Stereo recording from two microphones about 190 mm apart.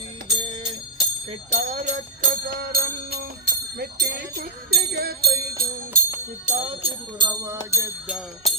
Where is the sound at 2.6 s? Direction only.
55° right (ahead or behind).